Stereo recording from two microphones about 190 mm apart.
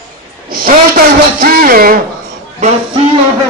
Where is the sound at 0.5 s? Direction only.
50° right (ahead or behind).